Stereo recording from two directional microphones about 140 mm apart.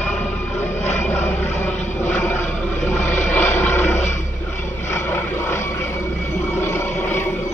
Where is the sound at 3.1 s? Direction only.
60° left (ahead or behind).